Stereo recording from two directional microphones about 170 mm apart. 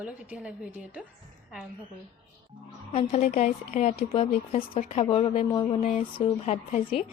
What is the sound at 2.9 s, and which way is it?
A woman's voice, 35° left (ahead or behind).